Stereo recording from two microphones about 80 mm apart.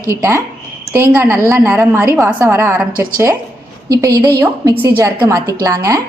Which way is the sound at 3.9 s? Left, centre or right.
Right.